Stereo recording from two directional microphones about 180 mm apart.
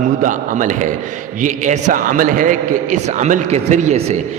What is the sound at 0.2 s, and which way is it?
A man's voice, 45° right (ahead or behind).